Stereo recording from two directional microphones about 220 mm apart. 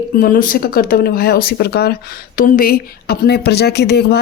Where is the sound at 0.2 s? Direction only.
40° left (ahead or behind).